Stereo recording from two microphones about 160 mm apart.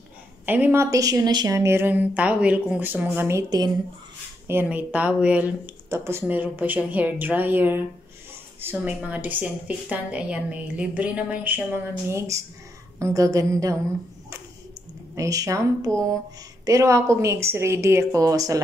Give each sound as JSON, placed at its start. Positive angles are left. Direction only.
{"t": 0.5, "sound": "a woman's voice", "side_deg": -15}
{"t": 4.5, "sound": "a woman's voice", "side_deg": -10}
{"t": 15.1, "sound": "a woman's voice", "side_deg": -20}